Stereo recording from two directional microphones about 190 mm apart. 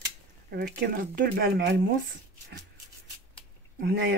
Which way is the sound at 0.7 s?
50° right (ahead or behind).